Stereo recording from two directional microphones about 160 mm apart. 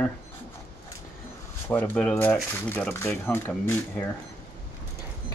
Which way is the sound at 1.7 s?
10° left (ahead or behind).